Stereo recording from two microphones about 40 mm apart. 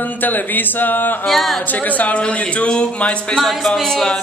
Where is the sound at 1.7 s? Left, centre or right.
Left.